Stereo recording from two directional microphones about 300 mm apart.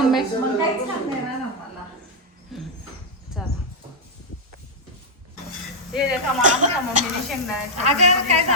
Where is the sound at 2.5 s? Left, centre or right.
Centre.